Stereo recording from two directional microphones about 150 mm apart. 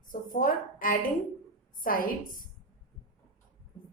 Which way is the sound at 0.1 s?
65° left (ahead or behind).